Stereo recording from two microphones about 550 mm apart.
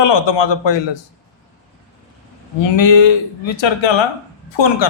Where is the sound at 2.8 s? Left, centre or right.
Left.